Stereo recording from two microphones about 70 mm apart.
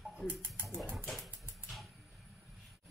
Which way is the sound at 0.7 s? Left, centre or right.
Centre.